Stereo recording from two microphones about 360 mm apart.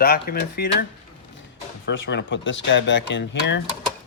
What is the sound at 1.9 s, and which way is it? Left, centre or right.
Speech, left.